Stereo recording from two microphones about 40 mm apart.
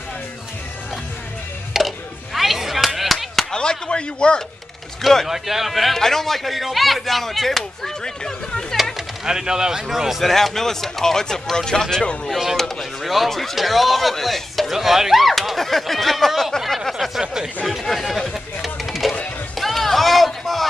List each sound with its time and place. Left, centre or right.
1.7 s chop: centre
3.5 s a sound: centre
5.2 s speech: centre
9.2 s speech: centre
10.2 s speech: centre
13.0 s speech: centre
14.7 s speech: centre
16.6 s a sound: centre
17.2 s speech: centre
17.6 s chatter: centre
19.5 s music: centre